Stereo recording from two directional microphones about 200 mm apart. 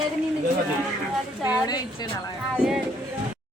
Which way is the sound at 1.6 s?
20° left (ahead or behind).